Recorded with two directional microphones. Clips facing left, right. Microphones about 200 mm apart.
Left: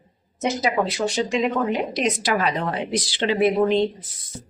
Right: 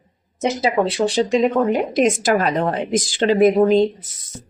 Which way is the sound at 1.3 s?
45° right (ahead or behind).